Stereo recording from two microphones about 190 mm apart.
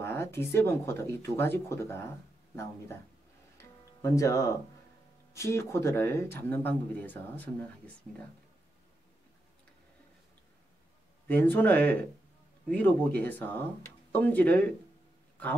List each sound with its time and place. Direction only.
0.0 s speech: 15° left (ahead or behind)
4.0 s speech: 15° left (ahead or behind)
11.5 s speech: 10° left (ahead or behind)